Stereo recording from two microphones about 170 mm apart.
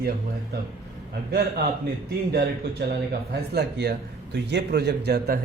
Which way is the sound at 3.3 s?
75° right (ahead or behind).